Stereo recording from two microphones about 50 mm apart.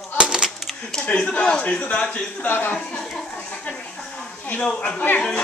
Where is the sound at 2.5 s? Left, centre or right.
Left.